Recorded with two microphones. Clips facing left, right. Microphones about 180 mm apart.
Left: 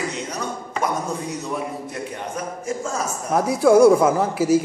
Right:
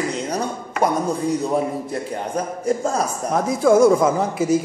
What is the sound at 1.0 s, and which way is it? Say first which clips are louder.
A man's voice: right 6 dB; 30° right (ahead or behind).